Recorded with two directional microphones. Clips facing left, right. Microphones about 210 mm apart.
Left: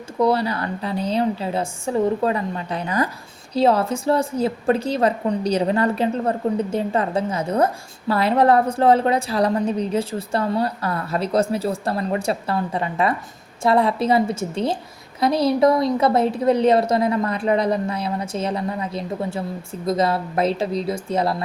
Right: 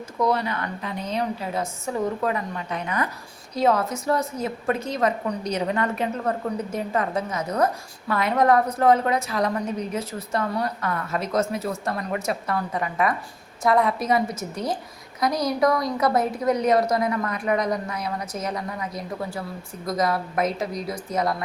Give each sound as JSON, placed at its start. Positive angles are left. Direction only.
{"t": 0.2, "sound": "a woman's voice", "side_deg": 30}